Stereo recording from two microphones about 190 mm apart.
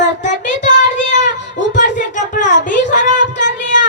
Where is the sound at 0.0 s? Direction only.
40° left (ahead or behind).